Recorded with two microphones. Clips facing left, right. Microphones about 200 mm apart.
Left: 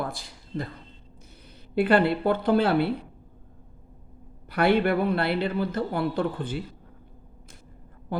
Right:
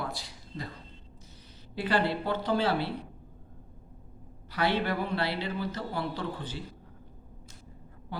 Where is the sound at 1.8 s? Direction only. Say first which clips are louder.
Left 8 dB; 55° left (ahead or behind).